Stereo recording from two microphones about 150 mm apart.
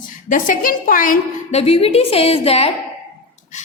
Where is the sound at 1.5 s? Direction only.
40° left (ahead or behind).